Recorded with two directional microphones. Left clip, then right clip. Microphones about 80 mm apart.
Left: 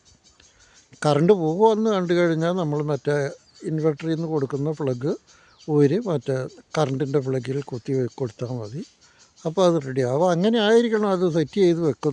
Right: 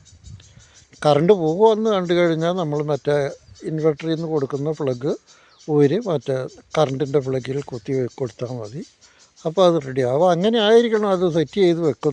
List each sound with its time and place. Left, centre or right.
0.9 s speech: left